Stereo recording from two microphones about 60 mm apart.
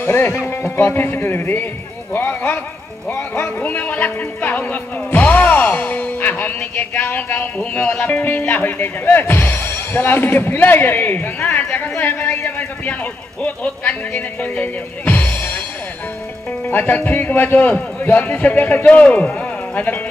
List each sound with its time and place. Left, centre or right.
0.0 s a man's voice: left
13.4 s music: left
16.7 s a man's voice: left